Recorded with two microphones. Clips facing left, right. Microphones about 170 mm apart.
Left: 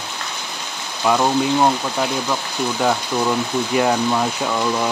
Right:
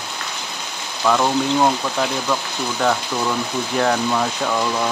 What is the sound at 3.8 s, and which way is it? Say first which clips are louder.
Speech: left 1 dB; 10° left (ahead or behind).